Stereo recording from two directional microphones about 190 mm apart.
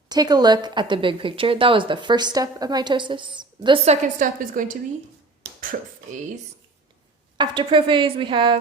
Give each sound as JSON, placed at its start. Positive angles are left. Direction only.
{"t": 0.1, "sound": "a woman's voice", "side_deg": -20}
{"t": 4.2, "sound": "a woman's voice", "side_deg": -45}
{"t": 7.3, "sound": "a woman's voice", "side_deg": -25}